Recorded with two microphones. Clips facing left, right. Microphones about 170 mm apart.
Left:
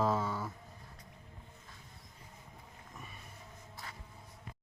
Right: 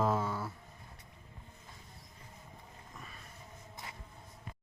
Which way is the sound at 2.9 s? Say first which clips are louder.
Left 1 dB; 5° left (ahead or behind).